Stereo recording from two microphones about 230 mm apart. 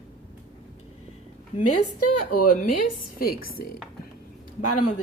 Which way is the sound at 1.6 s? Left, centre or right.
Left.